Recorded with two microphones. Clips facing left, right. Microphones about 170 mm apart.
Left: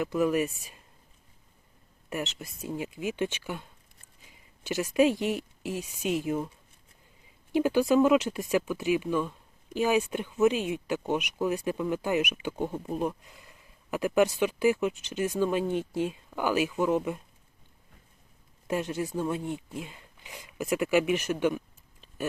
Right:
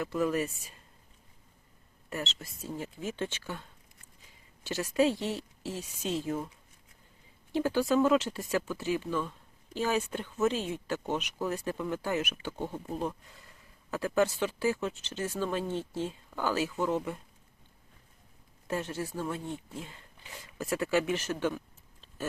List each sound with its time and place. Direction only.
0.0 s speech: 15° left (ahead or behind)
2.0 s speech: 15° left (ahead or behind)
7.5 s speech: 15° left (ahead or behind)
18.7 s speech: 15° left (ahead or behind)